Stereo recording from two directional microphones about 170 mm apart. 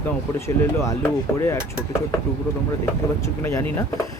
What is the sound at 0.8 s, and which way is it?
Speech, 15° left (ahead or behind).